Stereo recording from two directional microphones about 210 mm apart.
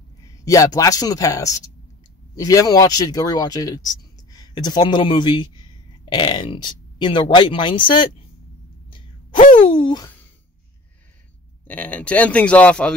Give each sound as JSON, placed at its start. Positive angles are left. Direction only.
{"t": 0.5, "sound": "a man's voice", "side_deg": 15}
{"t": 9.7, "sound": "hoot", "side_deg": 25}
{"t": 11.6, "sound": "a man's voice", "side_deg": 5}